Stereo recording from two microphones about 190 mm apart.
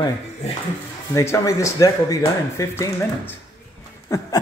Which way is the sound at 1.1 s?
15° left (ahead or behind).